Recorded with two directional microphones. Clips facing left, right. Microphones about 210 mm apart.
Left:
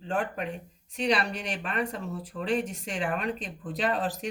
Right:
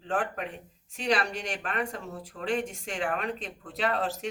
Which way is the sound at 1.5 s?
Centre (ahead or behind).